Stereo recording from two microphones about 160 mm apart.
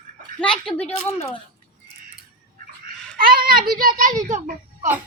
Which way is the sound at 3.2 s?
65° right (ahead or behind).